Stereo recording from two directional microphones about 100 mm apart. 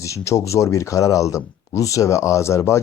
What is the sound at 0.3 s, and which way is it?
A man's voice, 30° left (ahead or behind).